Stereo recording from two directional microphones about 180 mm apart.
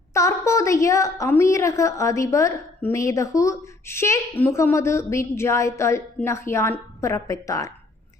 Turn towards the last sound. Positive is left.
turn(degrees=20)  # may be behind; listen again after turning